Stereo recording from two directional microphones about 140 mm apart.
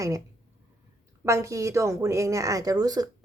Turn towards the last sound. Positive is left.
turn(degrees=-25)  # may be behind; listen again after turning